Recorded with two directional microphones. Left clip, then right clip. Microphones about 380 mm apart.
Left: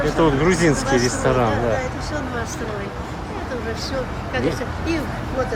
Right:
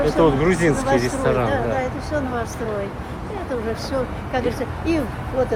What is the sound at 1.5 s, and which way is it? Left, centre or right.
Speech, centre.